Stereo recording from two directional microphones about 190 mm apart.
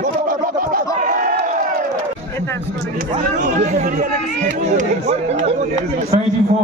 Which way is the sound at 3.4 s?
40° right (ahead or behind).